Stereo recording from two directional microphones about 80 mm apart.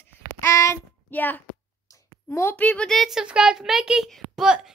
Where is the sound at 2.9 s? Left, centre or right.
Centre.